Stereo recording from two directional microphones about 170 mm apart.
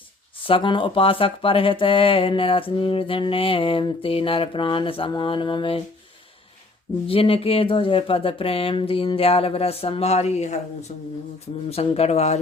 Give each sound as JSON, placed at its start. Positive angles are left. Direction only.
{"t": 0.4, "sound": "speech", "side_deg": 30}
{"t": 7.1, "sound": "speech", "side_deg": 35}
{"t": 11.7, "sound": "speech", "side_deg": 35}